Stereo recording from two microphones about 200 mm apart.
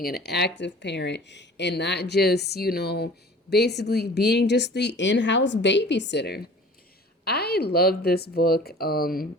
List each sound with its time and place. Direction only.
0.0 s speech: 55° left (ahead or behind)